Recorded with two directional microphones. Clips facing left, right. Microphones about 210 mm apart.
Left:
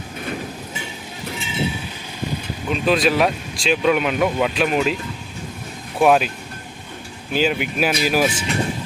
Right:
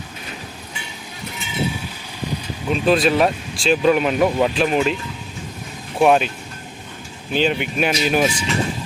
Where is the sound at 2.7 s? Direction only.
Centre (ahead or behind).